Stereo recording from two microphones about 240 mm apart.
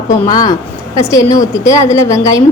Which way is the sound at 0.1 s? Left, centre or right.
Centre.